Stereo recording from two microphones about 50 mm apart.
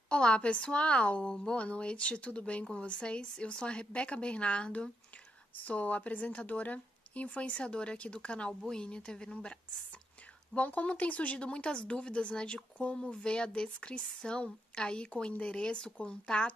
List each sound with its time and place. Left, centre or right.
0.1 s speech: left
5.6 s speech: left
10.5 s speech: left